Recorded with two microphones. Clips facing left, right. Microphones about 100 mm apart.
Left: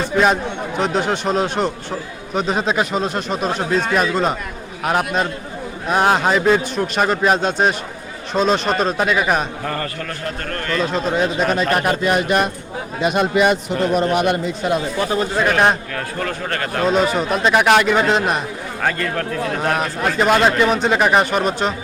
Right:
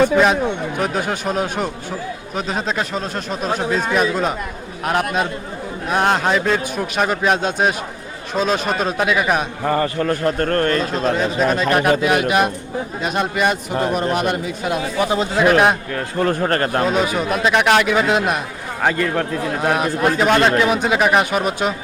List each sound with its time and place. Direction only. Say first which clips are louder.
0.8 s a man's voice: left 5 dB; 5° right (ahead or behind)
9.6 s a man's voice: right 6 dB; 20° right (ahead or behind)
10.1 s a man's voice: right 8 dB; 40° right (ahead or behind)
10.8 s a man's voice: even; centre (ahead or behind)
14.9 s speech: right 1 dB; 15° right (ahead or behind)
15.4 s a man's voice: right 2 dB; 5° right (ahead or behind)
16.2 s a man's voice: right 8 dB; 40° right (ahead or behind)
16.8 s a man's voice: left 1 dB; 5° right (ahead or behind)
18.8 s a man's voice: right 3 dB; 15° right (ahead or behind)